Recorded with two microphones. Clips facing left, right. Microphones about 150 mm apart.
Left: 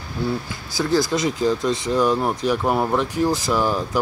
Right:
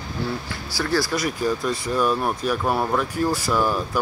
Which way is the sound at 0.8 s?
20° left (ahead or behind).